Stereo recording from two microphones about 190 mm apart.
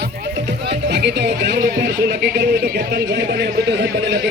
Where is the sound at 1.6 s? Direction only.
45° right (ahead or behind); by 3.9 s 60° right (ahead or behind).